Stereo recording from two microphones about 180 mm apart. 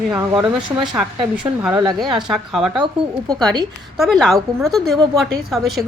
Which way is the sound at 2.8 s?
25° right (ahead or behind).